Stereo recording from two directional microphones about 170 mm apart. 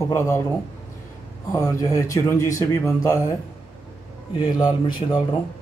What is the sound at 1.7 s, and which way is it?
Speech, 20° left (ahead or behind).